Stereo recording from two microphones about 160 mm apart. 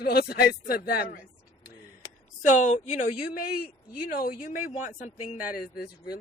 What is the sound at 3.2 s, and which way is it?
Speech, 70° left (ahead or behind).